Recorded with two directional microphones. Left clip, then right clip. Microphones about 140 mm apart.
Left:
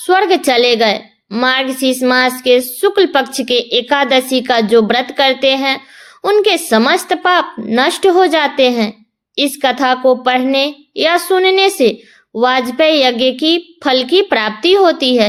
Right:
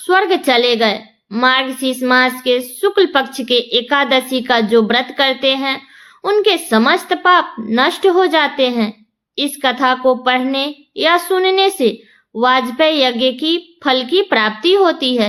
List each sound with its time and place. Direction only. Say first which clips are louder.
0.0 s a woman's voice: left 2 dB; 40° left (ahead or behind)